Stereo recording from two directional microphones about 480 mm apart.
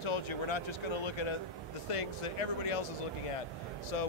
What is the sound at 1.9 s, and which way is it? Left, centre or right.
Speech, left.